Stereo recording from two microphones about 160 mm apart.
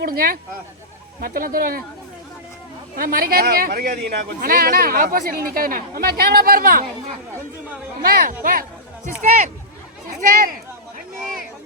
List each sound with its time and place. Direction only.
0.0 s speech: 65° right (ahead or behind)
2.9 s speech: 65° right (ahead or behind)
4.4 s speech: 65° right (ahead or behind)
8.0 s speech: 65° right (ahead or behind)
10.2 s speech: 60° right (ahead or behind)